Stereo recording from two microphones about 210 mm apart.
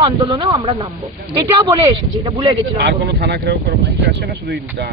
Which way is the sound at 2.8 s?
50° right (ahead or behind).